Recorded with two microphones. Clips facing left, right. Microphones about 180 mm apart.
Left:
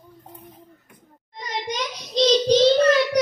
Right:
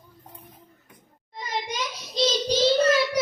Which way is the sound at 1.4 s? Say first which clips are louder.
Left 2 dB; 5° right (ahead or behind).